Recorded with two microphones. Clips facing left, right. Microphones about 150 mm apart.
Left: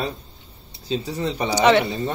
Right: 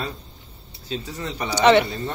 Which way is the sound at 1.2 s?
15° left (ahead or behind).